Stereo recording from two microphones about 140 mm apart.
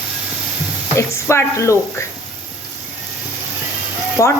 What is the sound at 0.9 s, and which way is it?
Speech, 20° left (ahead or behind).